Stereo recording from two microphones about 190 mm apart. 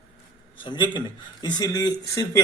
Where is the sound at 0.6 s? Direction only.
25° left (ahead or behind).